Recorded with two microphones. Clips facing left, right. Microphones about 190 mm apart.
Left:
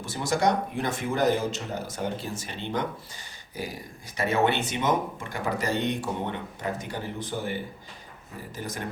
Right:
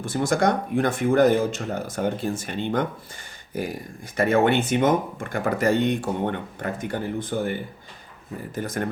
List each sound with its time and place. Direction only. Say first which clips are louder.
0.0 s speech: right 4 dB; 55° right (ahead or behind)
8.5 s speech: right 7 dB; 55° right (ahead or behind)